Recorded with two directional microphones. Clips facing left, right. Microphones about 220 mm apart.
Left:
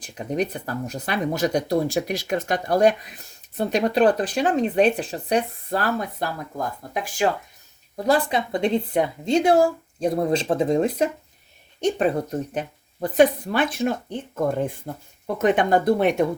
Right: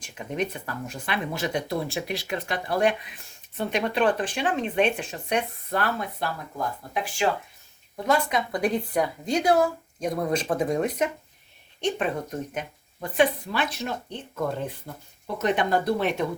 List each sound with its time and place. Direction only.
0.0 s a woman's voice: 35° left (ahead or behind)
13.5 s speech: 50° left (ahead or behind)
15.4 s speech: 50° left (ahead or behind)